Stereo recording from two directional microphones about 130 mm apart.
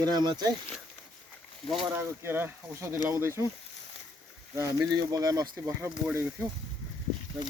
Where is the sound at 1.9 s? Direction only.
15° right (ahead or behind).